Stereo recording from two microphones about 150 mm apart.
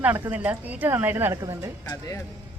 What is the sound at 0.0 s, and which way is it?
A woman's voice, 10° right (ahead or behind).